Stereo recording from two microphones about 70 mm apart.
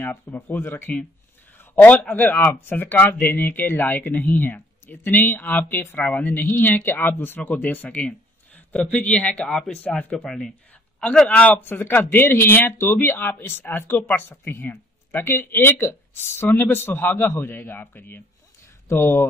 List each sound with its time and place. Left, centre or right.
0.0 s a man's voice: left
10.1 s a man's voice: centre; by 19.2 s left